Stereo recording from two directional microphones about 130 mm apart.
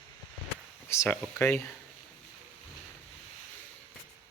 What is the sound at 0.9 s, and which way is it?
Speech, 20° left (ahead or behind).